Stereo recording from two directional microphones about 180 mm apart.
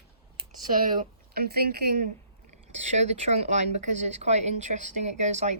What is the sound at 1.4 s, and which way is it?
Speech, 60° right (ahead or behind).